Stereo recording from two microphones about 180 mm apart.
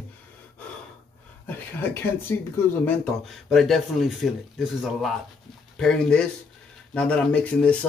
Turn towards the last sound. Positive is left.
turn(degrees=5)  # may be behind; listen again after turning